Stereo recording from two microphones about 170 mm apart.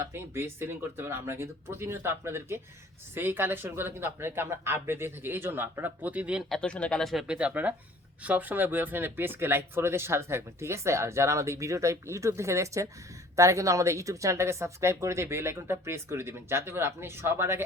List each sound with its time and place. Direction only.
0.1 s speech: 15° right (ahead or behind)
6.6 s speech: 5° left (ahead or behind); by 17.6 s 15° right (ahead or behind)